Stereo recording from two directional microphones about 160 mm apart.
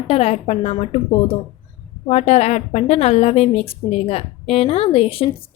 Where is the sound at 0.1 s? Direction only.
40° left (ahead or behind).